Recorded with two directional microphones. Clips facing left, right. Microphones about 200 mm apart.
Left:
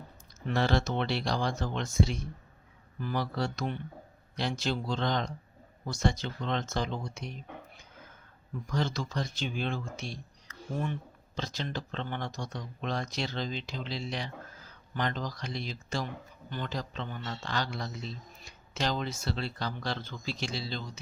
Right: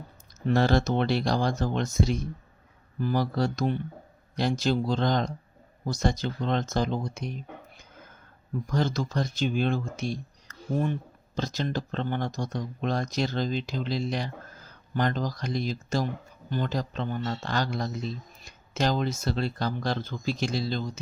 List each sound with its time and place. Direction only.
0.4 s speech: 40° right (ahead or behind)
8.6 s speech: 45° right (ahead or behind)
11.3 s speech: 45° right (ahead or behind)